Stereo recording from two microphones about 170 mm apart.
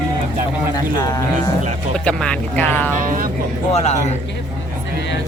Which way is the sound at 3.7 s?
40° left (ahead or behind).